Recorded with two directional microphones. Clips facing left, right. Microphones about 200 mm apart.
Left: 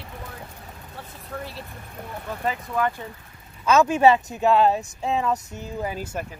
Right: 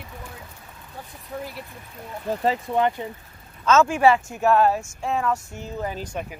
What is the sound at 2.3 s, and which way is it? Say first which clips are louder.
Speech: right 6 dB; 25° right (ahead or behind).